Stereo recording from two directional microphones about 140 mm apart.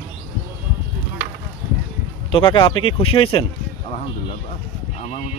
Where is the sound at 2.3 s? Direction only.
40° left (ahead or behind).